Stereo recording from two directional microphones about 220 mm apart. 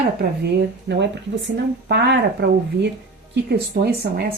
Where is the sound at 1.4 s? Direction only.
50° right (ahead or behind).